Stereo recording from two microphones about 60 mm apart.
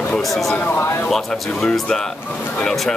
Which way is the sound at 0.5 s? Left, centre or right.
Left.